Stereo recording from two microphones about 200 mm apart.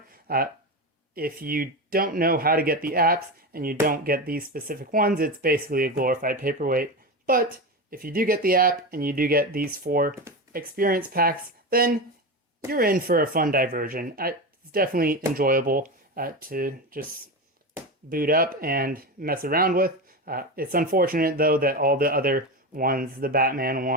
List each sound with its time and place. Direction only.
0.1 s a sound: 45° right (ahead or behind)
1.1 s speech: 50° right (ahead or behind)
7.9 s speech: 45° right (ahead or behind)